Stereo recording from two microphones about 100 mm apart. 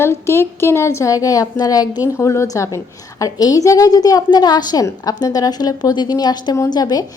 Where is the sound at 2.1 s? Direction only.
30° left (ahead or behind).